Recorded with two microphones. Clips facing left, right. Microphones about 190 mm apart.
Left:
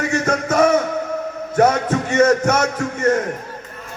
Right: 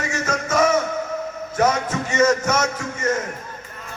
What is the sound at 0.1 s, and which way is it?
Music, 60° left (ahead or behind).